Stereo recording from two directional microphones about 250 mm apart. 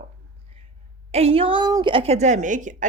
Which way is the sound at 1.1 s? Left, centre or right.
Right.